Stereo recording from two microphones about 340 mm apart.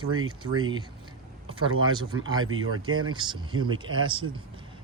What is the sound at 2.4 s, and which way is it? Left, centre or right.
Speech, right.